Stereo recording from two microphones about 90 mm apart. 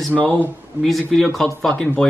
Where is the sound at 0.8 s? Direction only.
Centre (ahead or behind).